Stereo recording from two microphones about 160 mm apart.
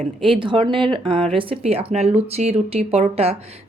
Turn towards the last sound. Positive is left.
turn(degrees=-40)  # may be behind; listen again after turning